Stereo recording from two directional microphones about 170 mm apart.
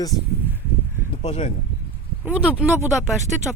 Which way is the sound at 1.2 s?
45° left (ahead or behind).